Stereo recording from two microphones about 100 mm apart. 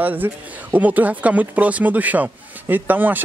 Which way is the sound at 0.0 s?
20° right (ahead or behind).